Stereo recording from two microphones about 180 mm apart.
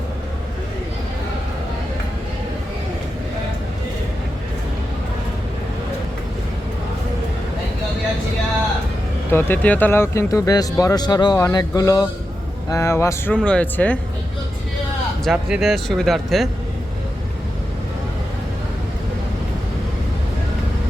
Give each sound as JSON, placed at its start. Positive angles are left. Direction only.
{"t": 9.3, "sound": "speech", "side_deg": 10}
{"t": 15.2, "sound": "speech", "side_deg": -5}